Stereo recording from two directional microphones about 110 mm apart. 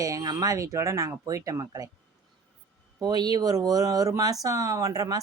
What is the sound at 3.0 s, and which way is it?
A woman's voice, 40° right (ahead or behind).